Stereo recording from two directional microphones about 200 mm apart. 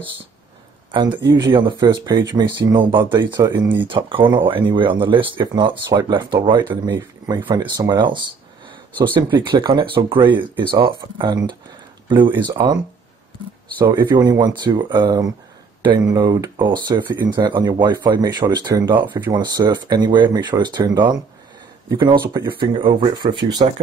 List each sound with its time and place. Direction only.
0.9 s speech: 25° right (ahead or behind)
13.7 s speech: 20° right (ahead or behind)